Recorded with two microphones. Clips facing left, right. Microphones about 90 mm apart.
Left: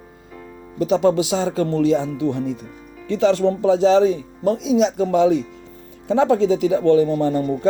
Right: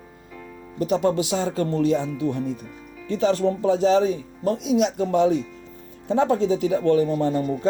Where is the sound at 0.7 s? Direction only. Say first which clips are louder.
Left 4 dB; 90° left.